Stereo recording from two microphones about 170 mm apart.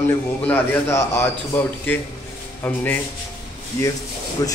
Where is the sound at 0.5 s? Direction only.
10° left (ahead or behind).